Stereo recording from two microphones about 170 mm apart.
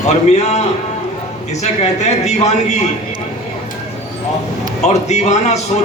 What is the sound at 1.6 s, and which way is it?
A man's voice, 40° left (ahead or behind).